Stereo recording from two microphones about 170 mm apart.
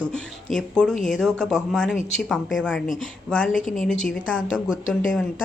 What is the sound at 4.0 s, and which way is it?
Speech, centre (ahead or behind).